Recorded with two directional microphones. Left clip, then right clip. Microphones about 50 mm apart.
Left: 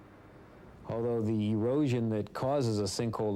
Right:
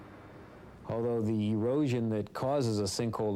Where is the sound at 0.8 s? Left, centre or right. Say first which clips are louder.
Even; right.